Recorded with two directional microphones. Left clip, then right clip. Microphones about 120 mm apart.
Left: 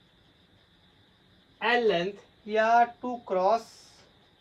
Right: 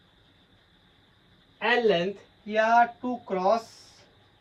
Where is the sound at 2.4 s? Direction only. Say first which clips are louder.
Right 1 dB; 25° left (ahead or behind).